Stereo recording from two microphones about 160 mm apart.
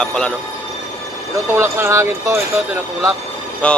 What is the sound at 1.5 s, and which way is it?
Speech, 15° right (ahead or behind).